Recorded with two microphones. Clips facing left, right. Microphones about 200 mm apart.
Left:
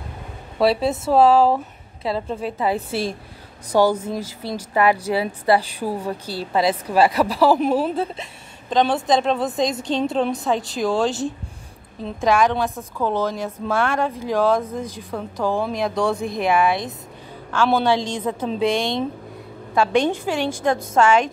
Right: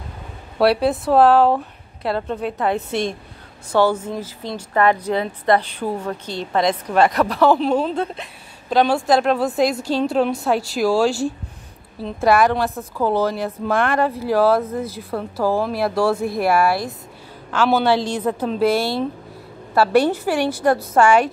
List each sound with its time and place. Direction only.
0.6 s speech: centre (ahead or behind)
3.7 s a woman's voice: 15° left (ahead or behind); by 9.5 s 5° right (ahead or behind)
9.7 s speech: 20° left (ahead or behind)
10.2 s speech: 5° right (ahead or behind)
11.0 s speech: 20° left (ahead or behind)
12.3 s a woman's voice: 10° right (ahead or behind)
14.6 s a woman's voice: 10° left (ahead or behind)
15.1 s a woman's voice: 5° right (ahead or behind)